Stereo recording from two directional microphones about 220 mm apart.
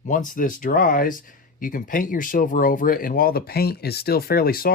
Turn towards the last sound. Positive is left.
turn(degrees=40)  # may be behind; listen again after turning